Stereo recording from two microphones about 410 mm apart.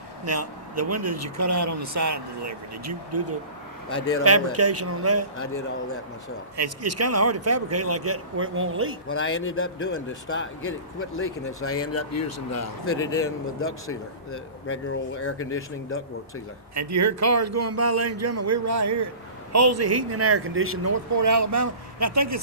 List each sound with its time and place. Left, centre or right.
0.3 s speech: right
6.6 s speech: right
9.0 s speech: left
13.1 s speech: centre
13.6 s speech: left
16.7 s speech: right